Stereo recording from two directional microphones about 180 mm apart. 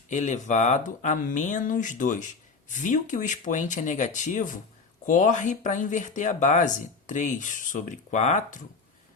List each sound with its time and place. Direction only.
0.1 s speech: 40° left (ahead or behind)